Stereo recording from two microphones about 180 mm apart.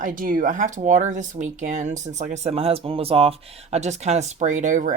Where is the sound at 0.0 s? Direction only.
50° right (ahead or behind).